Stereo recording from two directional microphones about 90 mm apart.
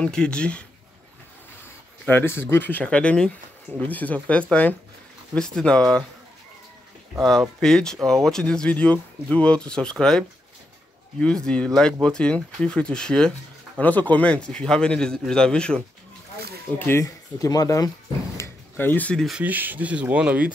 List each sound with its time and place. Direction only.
0.0 s speech: 10° left (ahead or behind)
2.0 s speech: 25° left (ahead or behind); by 6.0 s 10° left (ahead or behind)
7.2 s speech: 5° left (ahead or behind)
16.7 s speech: 25° left (ahead or behind)
17.0 s speech: 40° left (ahead or behind)
18.4 s a sound: 25° left (ahead or behind)
19.3 s speech: 20° right (ahead or behind)